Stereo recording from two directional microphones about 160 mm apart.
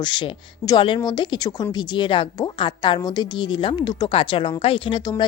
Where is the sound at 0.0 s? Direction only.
30° left (ahead or behind).